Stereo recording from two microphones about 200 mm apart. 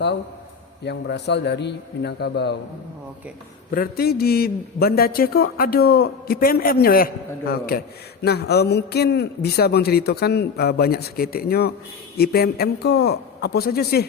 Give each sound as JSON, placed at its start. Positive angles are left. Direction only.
{"t": 0.9, "sound": "a man's voice", "side_deg": 60}
{"t": 3.8, "sound": "a man's voice", "side_deg": 50}